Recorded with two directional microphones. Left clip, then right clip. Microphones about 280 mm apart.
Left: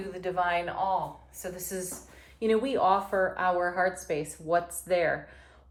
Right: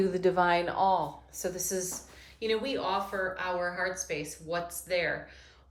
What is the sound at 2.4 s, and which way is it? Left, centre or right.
A woman's voice, centre.